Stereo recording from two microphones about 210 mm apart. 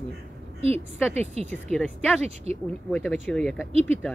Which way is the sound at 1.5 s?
5° left (ahead or behind).